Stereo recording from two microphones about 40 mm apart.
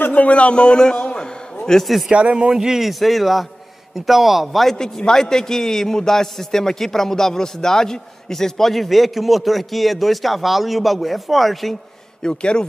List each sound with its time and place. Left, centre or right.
0.1 s a man's voice: left; by 1.8 s centre
2.0 s speech: right
2.5 s a man's voice: centre
4.7 s a man's voice: centre
12.2 s a man's voice: left